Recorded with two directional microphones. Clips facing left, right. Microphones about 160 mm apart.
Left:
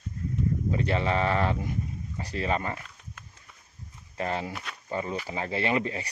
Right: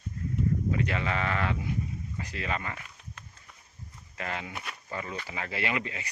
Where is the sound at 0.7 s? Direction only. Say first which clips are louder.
Left 3 dB; 30° left (ahead or behind).